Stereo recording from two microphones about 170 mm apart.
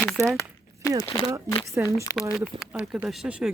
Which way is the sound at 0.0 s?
Centre (ahead or behind).